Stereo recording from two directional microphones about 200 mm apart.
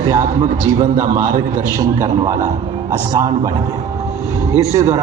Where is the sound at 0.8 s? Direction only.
40° right (ahead or behind).